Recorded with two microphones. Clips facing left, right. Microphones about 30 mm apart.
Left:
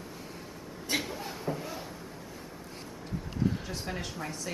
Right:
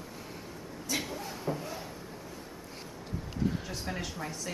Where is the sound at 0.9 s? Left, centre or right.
Left.